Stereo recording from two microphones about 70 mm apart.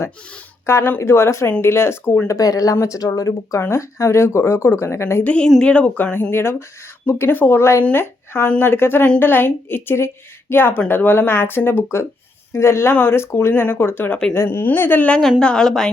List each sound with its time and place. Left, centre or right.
0.6 s speech: left
2.2 s speech: left
3.6 s speech: left
5.2 s speech: centre
15.4 s a woman's voice: centre